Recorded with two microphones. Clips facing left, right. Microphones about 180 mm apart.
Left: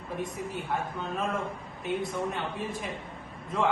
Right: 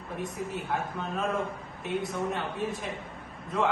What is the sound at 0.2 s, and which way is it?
A man's voice, centre (ahead or behind).